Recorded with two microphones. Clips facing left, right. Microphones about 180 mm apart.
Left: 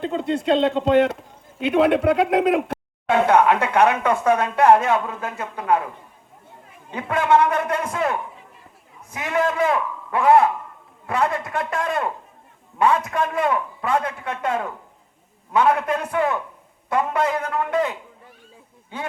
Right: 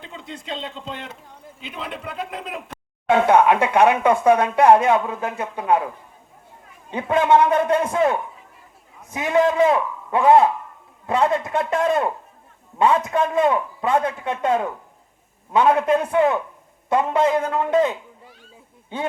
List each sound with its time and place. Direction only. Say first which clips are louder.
0.0 s speech: left 14 dB; 55° left (ahead or behind)
3.2 s speech: right 1 dB; 15° right (ahead or behind)
6.9 s a man's voice: right 2 dB; 20° right (ahead or behind)
9.1 s a man's voice: right 4 dB; 20° right (ahead or behind)